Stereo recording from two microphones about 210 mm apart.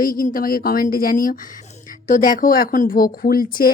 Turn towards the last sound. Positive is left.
turn(degrees=45)  # may be behind; listen again after turning